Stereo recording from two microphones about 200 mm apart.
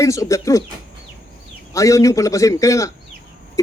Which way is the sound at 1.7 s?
15° left (ahead or behind).